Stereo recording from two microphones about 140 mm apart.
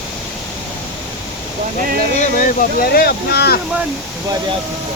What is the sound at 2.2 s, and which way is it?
Speech, 85° left.